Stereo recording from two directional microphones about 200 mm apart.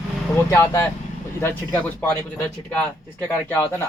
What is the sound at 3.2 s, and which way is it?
Speech, 10° left (ahead or behind).